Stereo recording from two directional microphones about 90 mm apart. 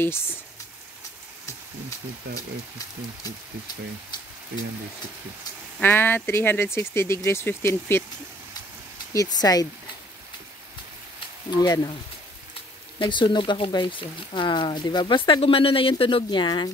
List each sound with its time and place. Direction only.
0.0 s speech: 25° left (ahead or behind)
5.8 s speech: 25° left (ahead or behind)
9.1 s speech: 40° left (ahead or behind)
11.5 s speech: 50° left (ahead or behind)
13.0 s speech: 60° left (ahead or behind)